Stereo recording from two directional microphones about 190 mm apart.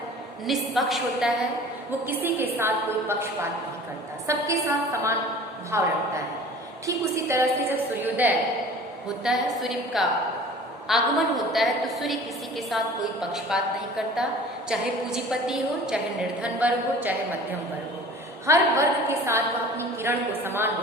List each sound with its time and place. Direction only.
0.4 s a woman's voice: centre (ahead or behind)
4.3 s a woman's voice: 15° right (ahead or behind)
18.4 s a woman's voice: 15° right (ahead or behind)